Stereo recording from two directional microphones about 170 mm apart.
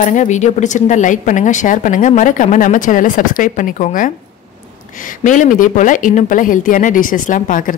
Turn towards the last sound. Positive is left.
turn(degrees=50)  # may be behind; listen again after turning